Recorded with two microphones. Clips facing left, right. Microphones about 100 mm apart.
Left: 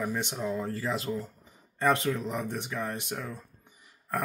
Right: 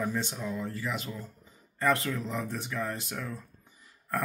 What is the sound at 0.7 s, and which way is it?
Speech, 35° left (ahead or behind).